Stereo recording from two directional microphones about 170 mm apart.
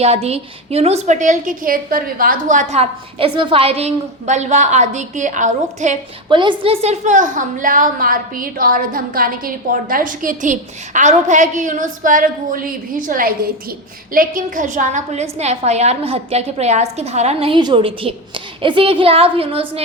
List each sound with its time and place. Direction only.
0.0 s a woman's voice: 35° right (ahead or behind)
6.2 s a woman's voice: 30° right (ahead or behind)